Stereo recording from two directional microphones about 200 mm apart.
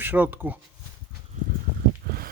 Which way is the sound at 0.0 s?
10° right (ahead or behind).